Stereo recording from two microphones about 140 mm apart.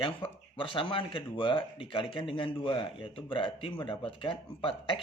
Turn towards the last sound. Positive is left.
turn(degrees=40)  # may be behind; listen again after turning